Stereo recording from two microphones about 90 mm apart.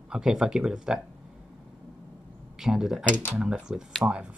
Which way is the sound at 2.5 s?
5° right (ahead or behind).